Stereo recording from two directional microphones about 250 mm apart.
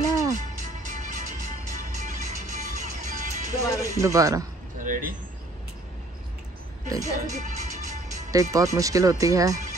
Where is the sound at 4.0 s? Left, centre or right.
Centre.